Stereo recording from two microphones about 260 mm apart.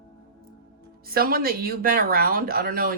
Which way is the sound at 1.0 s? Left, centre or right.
Right.